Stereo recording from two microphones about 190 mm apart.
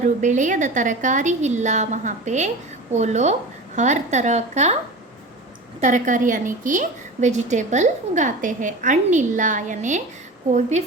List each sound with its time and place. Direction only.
0.0 s a woman's voice: 40° right (ahead or behind)
5.8 s a woman's voice: 40° right (ahead or behind)